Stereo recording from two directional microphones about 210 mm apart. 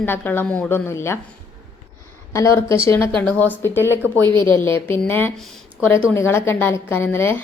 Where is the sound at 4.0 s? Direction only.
20° right (ahead or behind).